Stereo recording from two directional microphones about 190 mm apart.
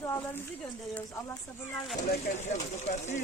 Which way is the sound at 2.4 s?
35° left (ahead or behind).